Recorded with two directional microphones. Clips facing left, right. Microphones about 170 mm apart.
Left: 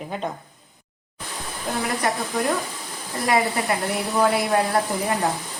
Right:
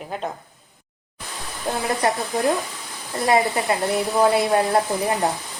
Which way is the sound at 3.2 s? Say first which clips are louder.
Right 2 dB; 25° right (ahead or behind).